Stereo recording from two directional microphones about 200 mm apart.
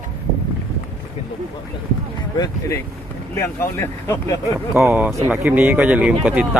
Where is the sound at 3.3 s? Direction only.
15° left (ahead or behind).